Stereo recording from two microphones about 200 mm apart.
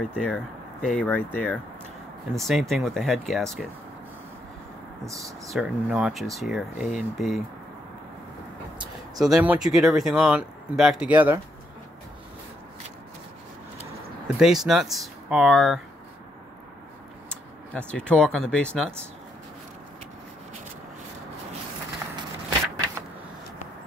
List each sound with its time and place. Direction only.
0.0 s speech: 5° left (ahead or behind)
5.0 s speech: 15° right (ahead or behind)
5.5 s speech: 5° right (ahead or behind)
9.2 s speech: 5° right (ahead or behind)
14.2 s speech: centre (ahead or behind)
17.3 s speech: 5° left (ahead or behind)